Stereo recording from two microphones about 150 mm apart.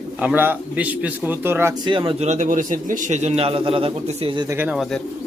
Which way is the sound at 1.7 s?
30° right (ahead or behind).